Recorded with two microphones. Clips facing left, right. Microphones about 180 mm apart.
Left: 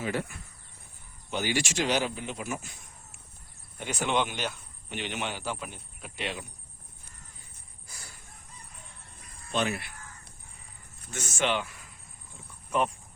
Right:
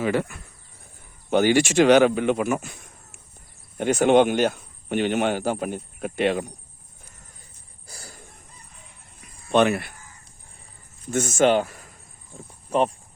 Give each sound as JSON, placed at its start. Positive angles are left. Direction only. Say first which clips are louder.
{"t": 0.0, "sound": "speech", "louder": "right 8 dB", "side_deg": -75}
{"t": 1.3, "sound": "speech", "louder": "right 12 dB", "side_deg": -55}
{"t": 3.8, "sound": "speech", "louder": "right 12 dB", "side_deg": -50}
{"t": 7.9, "sound": "a sound", "louder": "right 7 dB", "side_deg": -35}
{"t": 9.5, "sound": "speech", "louder": "right 11 dB", "side_deg": -65}
{"t": 11.1, "sound": "speech", "louder": "right 11 dB", "side_deg": -50}
{"t": 12.5, "sound": "cricket", "louder": "right 6 dB", "side_deg": -30}